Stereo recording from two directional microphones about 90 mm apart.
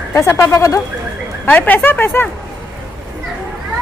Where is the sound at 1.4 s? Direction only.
20° left (ahead or behind).